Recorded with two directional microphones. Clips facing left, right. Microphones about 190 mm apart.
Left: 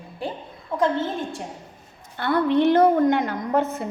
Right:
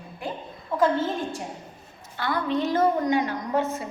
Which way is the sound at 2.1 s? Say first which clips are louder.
Left 6 dB; 60° left (ahead or behind).